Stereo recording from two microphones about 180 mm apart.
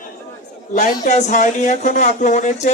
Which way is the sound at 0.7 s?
45° left (ahead or behind).